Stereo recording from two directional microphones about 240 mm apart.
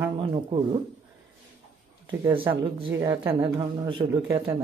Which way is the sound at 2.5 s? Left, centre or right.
Centre.